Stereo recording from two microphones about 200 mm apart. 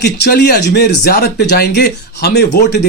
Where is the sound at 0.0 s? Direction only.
55° left (ahead or behind).